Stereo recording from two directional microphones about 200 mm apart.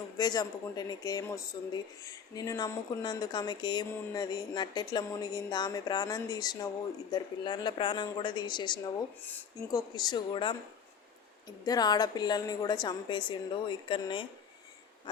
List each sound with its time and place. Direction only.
0.2 s speech: 20° left (ahead or behind)